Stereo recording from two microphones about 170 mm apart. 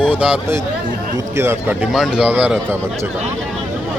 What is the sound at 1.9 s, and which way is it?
Speech, 5° right (ahead or behind).